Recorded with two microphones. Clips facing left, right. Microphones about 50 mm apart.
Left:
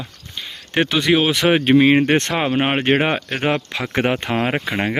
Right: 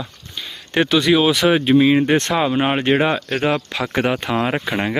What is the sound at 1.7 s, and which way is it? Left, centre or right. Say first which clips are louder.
Speech: left 2 dB; left.